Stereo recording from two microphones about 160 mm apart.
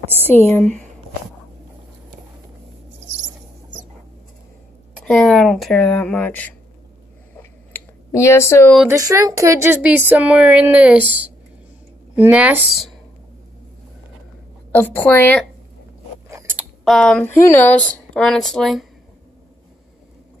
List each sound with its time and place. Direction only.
0.0 s a sound: 15° right (ahead or behind)
0.5 s speech: 10° left (ahead or behind)
5.0 s speech: 5° left (ahead or behind)
7.7 s a sound: 20° left (ahead or behind)
8.8 s speech: 20° right (ahead or behind)
12.2 s speech: 10° right (ahead or behind)
14.7 s speech: 10° left (ahead or behind)
16.3 s a sound: 20° right (ahead or behind)
16.5 s speech: centre (ahead or behind)